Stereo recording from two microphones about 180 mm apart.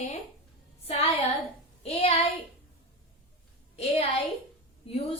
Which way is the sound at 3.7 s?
35° left (ahead or behind).